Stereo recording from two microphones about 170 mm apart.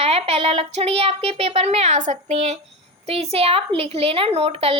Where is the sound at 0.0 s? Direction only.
35° right (ahead or behind).